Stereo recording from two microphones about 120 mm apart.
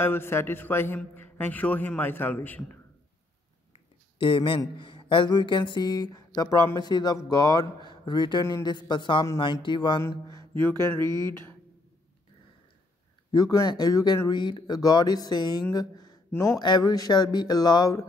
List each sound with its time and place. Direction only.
0.0 s a man's voice: 20° left (ahead or behind)
4.2 s speech: 45° left (ahead or behind)
10.0 s mantra: 30° left (ahead or behind)
10.6 s a man's voice: 20° left (ahead or behind)
11.0 s speech: 35° right (ahead or behind)
13.3 s speech: 30° left (ahead or behind)
15.7 s a sound: 35° left (ahead or behind)
16.3 s mantra: 25° left (ahead or behind)
16.6 s speech: 35° left (ahead or behind)